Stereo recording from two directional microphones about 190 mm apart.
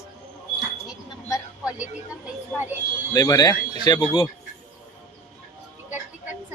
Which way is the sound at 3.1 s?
20° left (ahead or behind).